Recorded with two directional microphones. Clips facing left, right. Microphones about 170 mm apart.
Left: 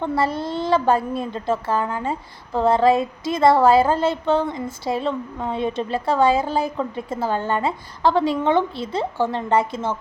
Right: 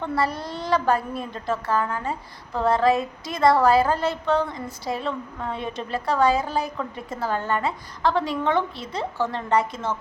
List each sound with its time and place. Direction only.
0.0 s a woman's voice: 25° left (ahead or behind)